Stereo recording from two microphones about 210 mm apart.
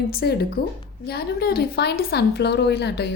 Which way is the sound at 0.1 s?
50° left (ahead or behind).